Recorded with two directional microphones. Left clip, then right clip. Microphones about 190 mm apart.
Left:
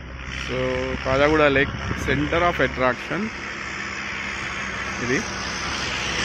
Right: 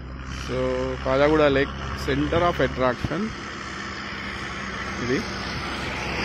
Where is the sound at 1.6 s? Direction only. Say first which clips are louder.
Left 3 dB; 60° right (ahead or behind).